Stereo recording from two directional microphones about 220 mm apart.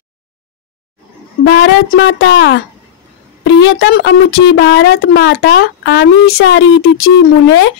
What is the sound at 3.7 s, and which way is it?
Speech, 45° left (ahead or behind).